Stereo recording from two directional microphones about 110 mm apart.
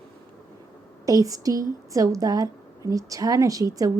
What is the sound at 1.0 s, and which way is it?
A woman's voice, 30° right (ahead or behind).